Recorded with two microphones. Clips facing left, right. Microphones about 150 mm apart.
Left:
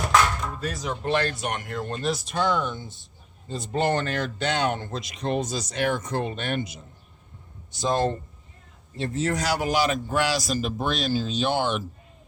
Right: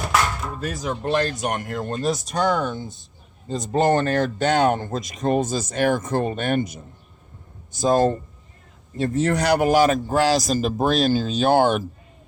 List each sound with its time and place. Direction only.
0.6 s speech: 45° right (ahead or behind)
9.0 s speech: 60° right (ahead or behind)